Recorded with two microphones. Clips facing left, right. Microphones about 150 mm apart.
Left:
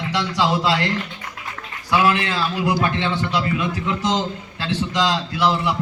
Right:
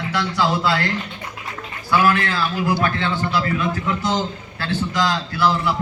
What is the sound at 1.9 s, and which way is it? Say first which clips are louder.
A man's voice: right 1 dB; 20° left (ahead or behind).